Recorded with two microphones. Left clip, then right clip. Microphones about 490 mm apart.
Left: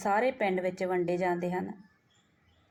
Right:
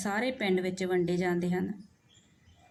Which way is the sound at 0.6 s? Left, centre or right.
Centre.